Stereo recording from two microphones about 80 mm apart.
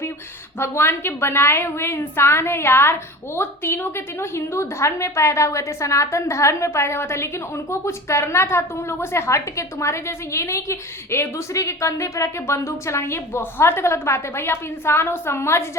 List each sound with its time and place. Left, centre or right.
0.6 s a woman's voice: left